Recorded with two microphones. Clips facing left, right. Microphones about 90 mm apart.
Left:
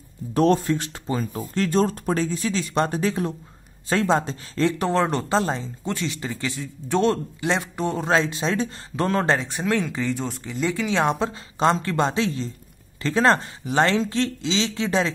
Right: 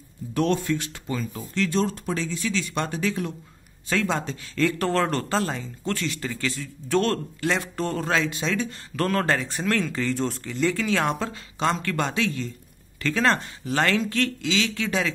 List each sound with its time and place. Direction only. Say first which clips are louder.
0.3 s speech: left 4 dB; 35° left (ahead or behind); by 8.1 s 15° left (ahead or behind)
8.1 s speech: left 5 dB; 30° left (ahead or behind)
8.9 s speech: left 2 dB; 20° left (ahead or behind)